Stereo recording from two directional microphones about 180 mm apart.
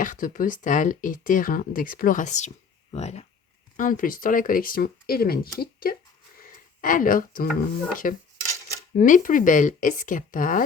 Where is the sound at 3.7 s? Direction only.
50° left (ahead or behind).